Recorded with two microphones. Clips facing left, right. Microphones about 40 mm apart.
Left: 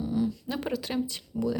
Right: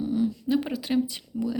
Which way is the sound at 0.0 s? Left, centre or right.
Right.